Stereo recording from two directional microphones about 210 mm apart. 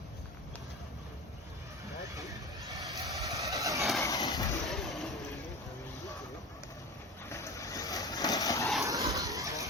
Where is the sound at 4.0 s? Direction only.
15° left (ahead or behind).